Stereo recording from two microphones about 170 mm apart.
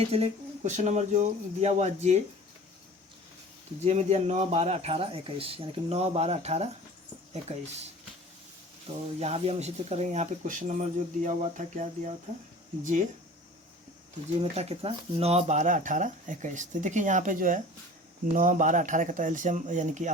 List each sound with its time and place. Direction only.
0.0 s speech: 35° right (ahead or behind)
3.8 s speech: 40° right (ahead or behind)
9.2 s speech: 35° right (ahead or behind)
14.5 s speech: 35° right (ahead or behind)